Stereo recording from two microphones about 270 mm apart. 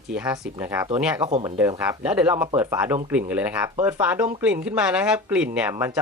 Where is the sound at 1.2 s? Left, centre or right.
Centre.